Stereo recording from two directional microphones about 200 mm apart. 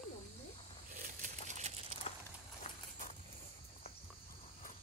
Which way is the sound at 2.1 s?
30° left (ahead or behind).